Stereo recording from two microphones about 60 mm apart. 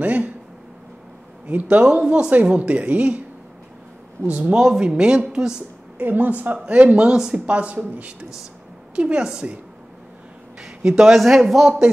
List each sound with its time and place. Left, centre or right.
0.0 s speech: right
1.5 s speech: right
4.3 s speech: right
5.9 s a woman's voice: right
8.9 s speech: centre
10.8 s speech: centre